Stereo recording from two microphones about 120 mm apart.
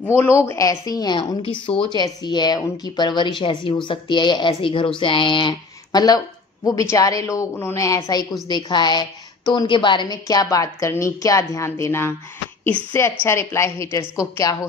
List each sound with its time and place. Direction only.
0.2 s a woman's voice: 20° left (ahead or behind); by 10.1 s 40° left (ahead or behind)
10.2 s a woman's voice: 30° left (ahead or behind)